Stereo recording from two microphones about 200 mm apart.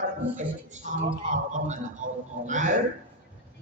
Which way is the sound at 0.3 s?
40° right (ahead or behind).